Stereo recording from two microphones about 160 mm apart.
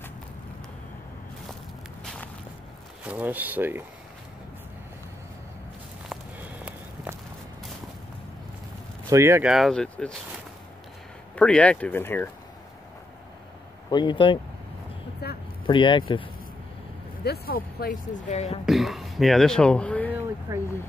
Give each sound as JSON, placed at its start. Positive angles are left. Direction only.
{"t": 3.1, "sound": "speech", "side_deg": -10}
{"t": 6.1, "sound": "walk", "side_deg": -5}
{"t": 9.1, "sound": "speech", "side_deg": -15}
{"t": 9.5, "sound": "speech", "side_deg": 0}
{"t": 11.3, "sound": "speech", "side_deg": 5}
{"t": 13.8, "sound": "speech", "side_deg": 30}
{"t": 15.2, "sound": "a sound", "side_deg": 85}
{"t": 15.6, "sound": "speech", "side_deg": 30}
{"t": 17.2, "sound": "speech", "side_deg": 75}
{"t": 18.3, "sound": "a woman's voice", "side_deg": 45}
{"t": 18.7, "sound": "speech", "side_deg": 0}
{"t": 20.5, "sound": "speech", "side_deg": -20}